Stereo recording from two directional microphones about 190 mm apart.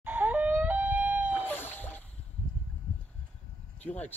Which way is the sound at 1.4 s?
10° left (ahead or behind).